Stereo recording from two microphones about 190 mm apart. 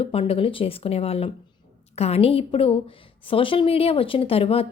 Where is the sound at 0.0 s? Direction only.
30° left (ahead or behind).